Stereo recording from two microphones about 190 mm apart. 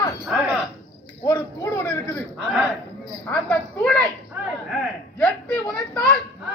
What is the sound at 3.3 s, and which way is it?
Speech, 5° left (ahead or behind).